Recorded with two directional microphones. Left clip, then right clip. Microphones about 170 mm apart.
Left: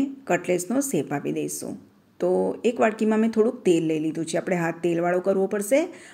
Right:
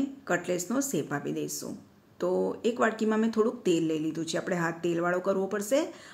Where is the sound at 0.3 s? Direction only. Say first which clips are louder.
Left 6 dB; 20° left (ahead or behind).